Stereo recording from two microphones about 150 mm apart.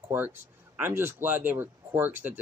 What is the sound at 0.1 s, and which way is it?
Speech, 15° right (ahead or behind).